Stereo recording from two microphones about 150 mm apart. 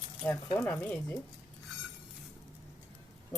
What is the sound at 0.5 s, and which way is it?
Speech, 10° left (ahead or behind).